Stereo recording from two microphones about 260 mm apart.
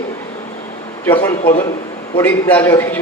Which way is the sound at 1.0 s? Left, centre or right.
Centre.